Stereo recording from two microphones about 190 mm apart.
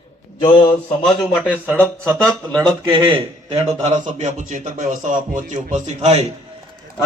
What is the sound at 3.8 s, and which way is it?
Speech, 35° right (ahead or behind).